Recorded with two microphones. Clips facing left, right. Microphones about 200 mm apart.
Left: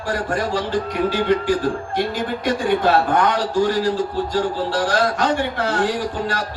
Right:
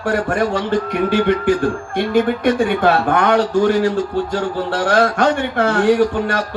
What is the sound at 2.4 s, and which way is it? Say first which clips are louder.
A man's voice: right 4 dB; 50° right (ahead or behind).